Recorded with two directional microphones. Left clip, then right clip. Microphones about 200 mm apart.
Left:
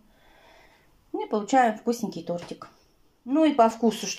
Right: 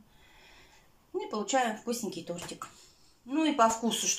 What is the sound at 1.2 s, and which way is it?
Speech, 35° left (ahead or behind).